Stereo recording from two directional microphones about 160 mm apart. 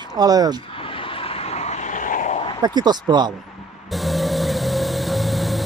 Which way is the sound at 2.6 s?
25° right (ahead or behind).